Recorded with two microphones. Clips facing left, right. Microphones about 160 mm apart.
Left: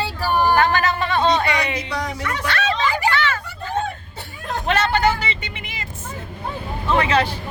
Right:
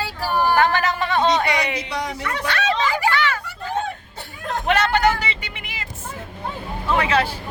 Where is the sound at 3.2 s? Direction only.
10° right (ahead or behind).